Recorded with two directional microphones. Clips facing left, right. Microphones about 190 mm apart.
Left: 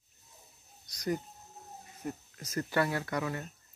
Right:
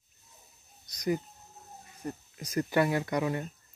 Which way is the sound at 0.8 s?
20° right (ahead or behind).